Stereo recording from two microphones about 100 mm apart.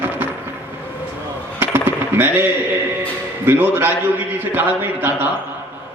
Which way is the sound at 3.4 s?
20° right (ahead or behind).